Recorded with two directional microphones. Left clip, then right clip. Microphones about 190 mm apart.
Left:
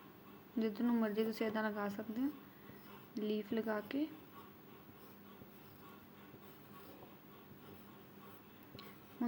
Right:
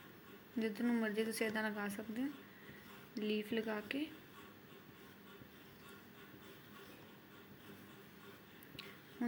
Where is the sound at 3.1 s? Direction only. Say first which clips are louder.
Even; 60° left (ahead or behind).